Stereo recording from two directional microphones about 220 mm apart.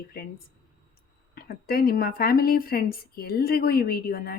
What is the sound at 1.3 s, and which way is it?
A woman's voice, 40° left (ahead or behind).